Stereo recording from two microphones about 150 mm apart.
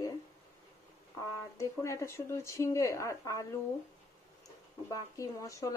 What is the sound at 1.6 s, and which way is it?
A woman's voice, 20° left (ahead or behind).